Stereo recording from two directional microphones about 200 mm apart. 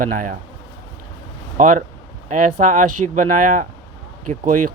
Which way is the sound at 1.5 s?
40° right (ahead or behind).